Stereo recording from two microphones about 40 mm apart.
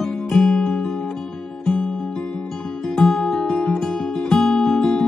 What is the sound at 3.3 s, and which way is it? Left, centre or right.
Guitar, left.